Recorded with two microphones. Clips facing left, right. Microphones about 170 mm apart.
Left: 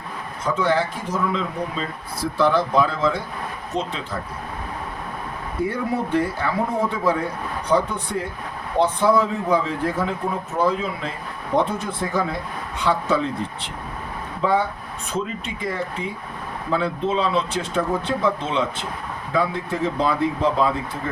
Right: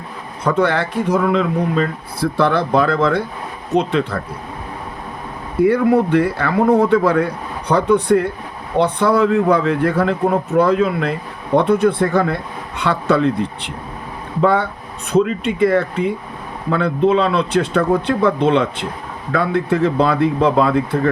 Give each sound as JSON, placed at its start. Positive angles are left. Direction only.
{"t": 0.4, "sound": "a man's voice", "side_deg": -65}
{"t": 5.6, "sound": "a man's voice", "side_deg": -65}